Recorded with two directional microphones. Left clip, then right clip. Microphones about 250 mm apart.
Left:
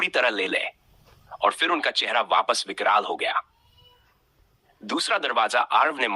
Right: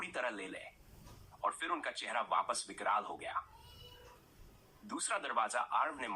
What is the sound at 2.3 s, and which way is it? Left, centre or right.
Speech, left.